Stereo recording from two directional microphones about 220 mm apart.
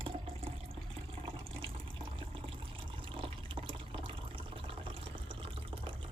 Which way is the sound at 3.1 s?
25° right (ahead or behind).